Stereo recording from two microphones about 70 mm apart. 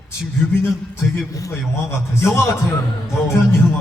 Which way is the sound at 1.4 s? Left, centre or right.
Left.